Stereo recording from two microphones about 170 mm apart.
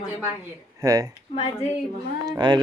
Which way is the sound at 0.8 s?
20° right (ahead or behind).